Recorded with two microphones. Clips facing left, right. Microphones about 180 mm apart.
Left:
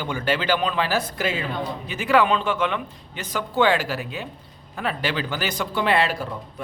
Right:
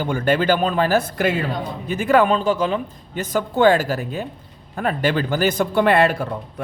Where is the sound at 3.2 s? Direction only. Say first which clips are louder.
Right 5 dB; 45° right (ahead or behind).